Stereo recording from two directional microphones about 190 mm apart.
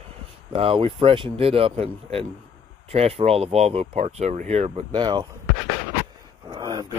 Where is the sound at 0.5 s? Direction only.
30° right (ahead or behind).